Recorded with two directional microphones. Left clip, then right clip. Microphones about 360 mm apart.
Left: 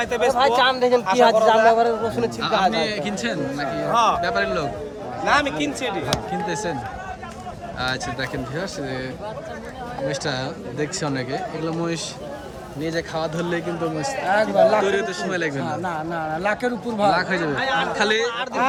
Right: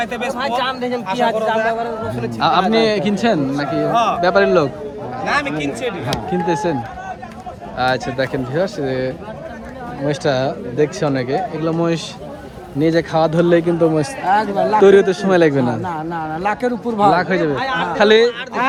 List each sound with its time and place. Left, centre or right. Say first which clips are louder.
0.0 s speech: left 1 dB; centre
0.3 s a man's voice: left 2 dB; left
2.4 s speech: right 7 dB; centre
5.2 s speech: right 1 dB; centre
6.5 s speech: right 10 dB; centre
7.8 s speech: right 8 dB; centre